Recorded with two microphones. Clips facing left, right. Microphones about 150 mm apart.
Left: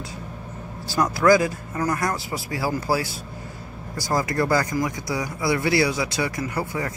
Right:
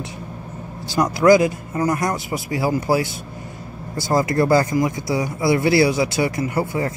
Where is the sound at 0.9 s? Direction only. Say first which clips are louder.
Right 4 dB; 20° right (ahead or behind).